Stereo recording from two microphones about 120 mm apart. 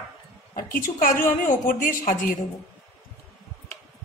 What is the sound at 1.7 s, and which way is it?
Speech, 90° left.